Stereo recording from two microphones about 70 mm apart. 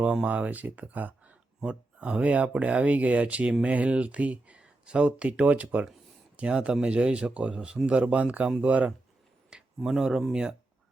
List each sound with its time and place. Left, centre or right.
0.3 s speech: right
9.5 s speech: centre